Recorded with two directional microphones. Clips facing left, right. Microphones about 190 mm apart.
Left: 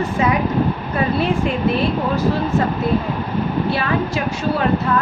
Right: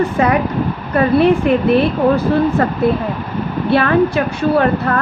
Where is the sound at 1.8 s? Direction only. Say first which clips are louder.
Right 5 dB; 60° right (ahead or behind).